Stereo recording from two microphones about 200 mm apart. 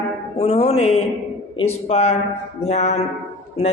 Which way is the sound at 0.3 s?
30° left (ahead or behind).